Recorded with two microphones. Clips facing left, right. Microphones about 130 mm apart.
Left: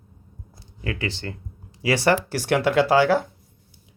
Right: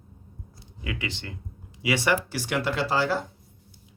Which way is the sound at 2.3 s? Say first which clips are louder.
Left 6 dB; 50° left (ahead or behind).